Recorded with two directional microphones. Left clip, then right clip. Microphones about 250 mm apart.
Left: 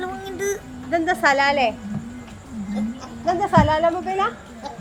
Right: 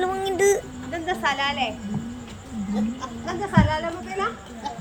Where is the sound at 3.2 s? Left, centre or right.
Left.